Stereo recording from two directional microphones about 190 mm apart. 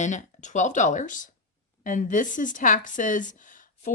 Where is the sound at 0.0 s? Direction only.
40° left (ahead or behind).